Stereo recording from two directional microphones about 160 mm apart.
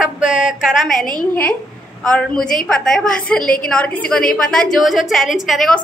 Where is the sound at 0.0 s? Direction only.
5° right (ahead or behind).